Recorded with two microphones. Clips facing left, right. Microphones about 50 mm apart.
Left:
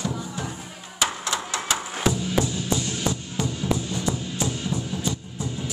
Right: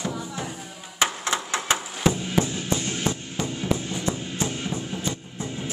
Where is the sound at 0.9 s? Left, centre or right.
Right.